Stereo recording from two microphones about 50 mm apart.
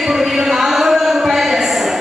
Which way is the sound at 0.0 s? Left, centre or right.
Centre.